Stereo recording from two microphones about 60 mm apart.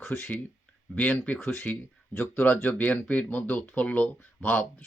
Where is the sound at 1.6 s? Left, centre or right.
Left.